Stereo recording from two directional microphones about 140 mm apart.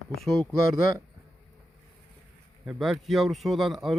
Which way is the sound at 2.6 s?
Centre (ahead or behind).